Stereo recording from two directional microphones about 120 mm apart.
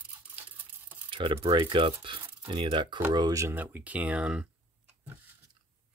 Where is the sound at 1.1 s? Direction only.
45° right (ahead or behind).